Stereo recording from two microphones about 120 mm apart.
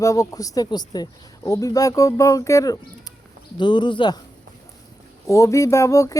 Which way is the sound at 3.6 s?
40° left (ahead or behind).